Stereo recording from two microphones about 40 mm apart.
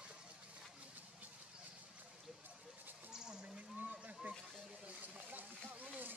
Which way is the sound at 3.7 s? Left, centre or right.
Right.